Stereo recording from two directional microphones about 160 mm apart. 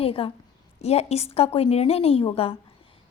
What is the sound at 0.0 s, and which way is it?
A woman's voice, 35° left (ahead or behind).